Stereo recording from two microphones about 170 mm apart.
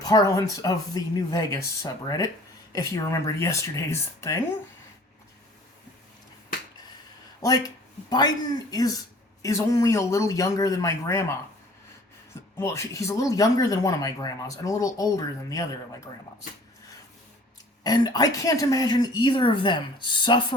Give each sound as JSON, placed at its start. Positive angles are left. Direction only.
{"t": 0.0, "sound": "speech", "side_deg": 20}
{"t": 8.1, "sound": "speech", "side_deg": 25}
{"t": 12.5, "sound": "speech", "side_deg": 15}
{"t": 17.8, "sound": "speech", "side_deg": 25}